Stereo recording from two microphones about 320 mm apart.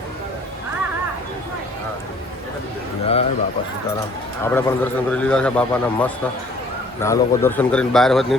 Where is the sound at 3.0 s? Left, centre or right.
Centre.